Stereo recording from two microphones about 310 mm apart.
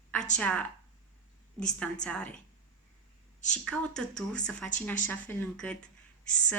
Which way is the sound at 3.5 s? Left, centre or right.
Centre.